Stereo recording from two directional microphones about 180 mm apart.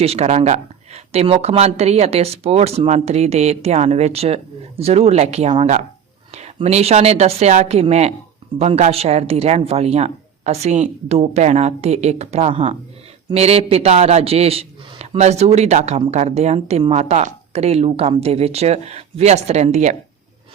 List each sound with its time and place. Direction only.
0.0 s speech: 35° right (ahead or behind)